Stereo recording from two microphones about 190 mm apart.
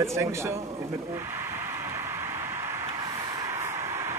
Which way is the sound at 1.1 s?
15° right (ahead or behind).